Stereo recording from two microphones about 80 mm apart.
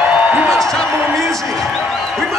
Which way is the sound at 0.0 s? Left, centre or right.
Centre.